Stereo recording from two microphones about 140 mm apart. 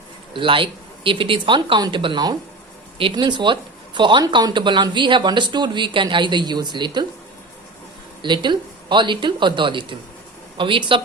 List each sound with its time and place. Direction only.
0.3 s speech: 40° right (ahead or behind)
8.2 s speech: 35° right (ahead or behind)